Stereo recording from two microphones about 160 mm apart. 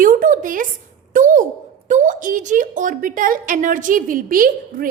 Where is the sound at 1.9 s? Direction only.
50° right (ahead or behind).